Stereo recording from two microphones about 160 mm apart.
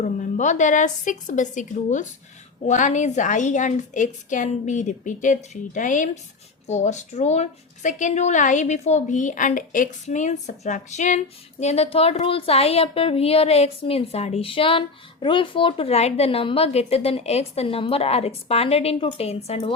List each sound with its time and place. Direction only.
0.0 s a woman's voice: 50° left (ahead or behind)